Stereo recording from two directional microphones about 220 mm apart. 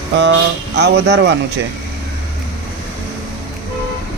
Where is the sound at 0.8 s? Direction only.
55° right (ahead or behind).